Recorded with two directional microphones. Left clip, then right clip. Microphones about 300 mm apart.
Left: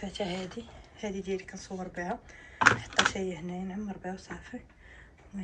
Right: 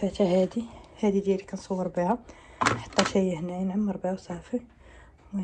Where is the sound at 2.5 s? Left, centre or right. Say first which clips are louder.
Left 1 dB; centre.